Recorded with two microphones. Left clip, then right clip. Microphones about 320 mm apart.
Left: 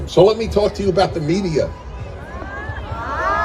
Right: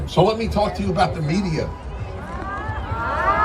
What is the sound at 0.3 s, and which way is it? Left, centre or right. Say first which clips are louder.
Speech: left 4 dB; right.